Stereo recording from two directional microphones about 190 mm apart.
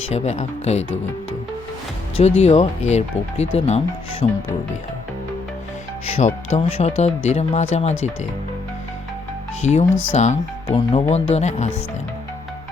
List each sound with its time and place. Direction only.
0.1 s speech: 35° left (ahead or behind)
2.1 s speech: 35° left (ahead or behind)
6.1 s speech: 30° left (ahead or behind)
9.6 s speech: 35° left (ahead or behind)